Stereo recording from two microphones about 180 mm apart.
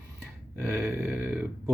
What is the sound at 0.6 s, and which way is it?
Speech, 5° right (ahead or behind).